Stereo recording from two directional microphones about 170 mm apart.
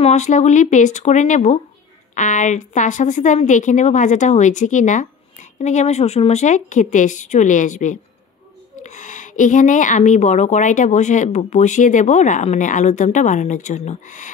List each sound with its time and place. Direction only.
0.0 s a woman's voice: 45° left (ahead or behind)